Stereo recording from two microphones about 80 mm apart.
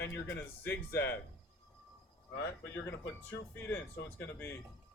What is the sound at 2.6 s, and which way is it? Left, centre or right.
Speech, left.